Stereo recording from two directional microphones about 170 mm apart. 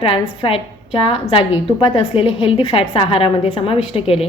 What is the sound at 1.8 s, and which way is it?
A woman's voice, 30° left (ahead or behind).